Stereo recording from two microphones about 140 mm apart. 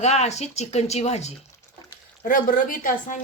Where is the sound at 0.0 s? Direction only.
50° left (ahead or behind).